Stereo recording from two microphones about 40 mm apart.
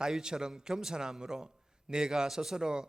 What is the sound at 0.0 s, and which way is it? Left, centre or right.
A man's voice, centre.